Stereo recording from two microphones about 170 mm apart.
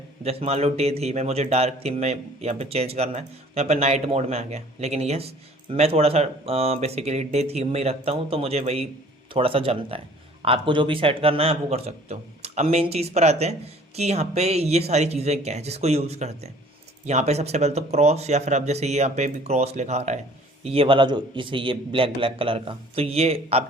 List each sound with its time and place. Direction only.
0.3 s a man's voice: 35° right (ahead or behind)